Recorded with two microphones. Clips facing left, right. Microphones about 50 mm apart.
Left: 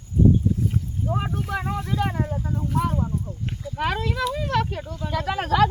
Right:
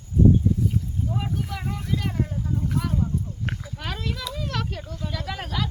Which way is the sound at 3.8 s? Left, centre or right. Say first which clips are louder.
Left 11 dB; left.